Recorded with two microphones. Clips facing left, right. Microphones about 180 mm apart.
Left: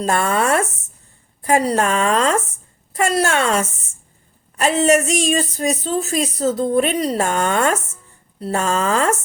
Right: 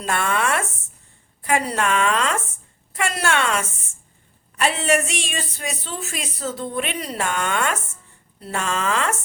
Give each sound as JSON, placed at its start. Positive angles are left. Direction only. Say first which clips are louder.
{"t": 0.0, "sound": "a woman's voice", "louder": "left 5 dB", "side_deg": 40}